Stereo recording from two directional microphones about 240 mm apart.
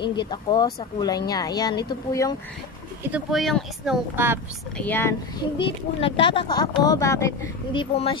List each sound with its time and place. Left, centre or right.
0.0 s speech: centre
3.1 s speech: centre
4.7 s speech: centre
5.6 s speech: left